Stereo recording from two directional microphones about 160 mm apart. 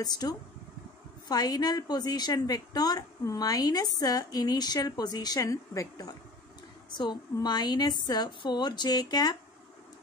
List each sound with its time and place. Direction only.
0.0 s a woman's voice: 25° left (ahead or behind)